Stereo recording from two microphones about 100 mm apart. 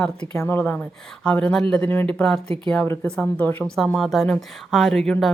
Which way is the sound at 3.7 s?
5° left (ahead or behind).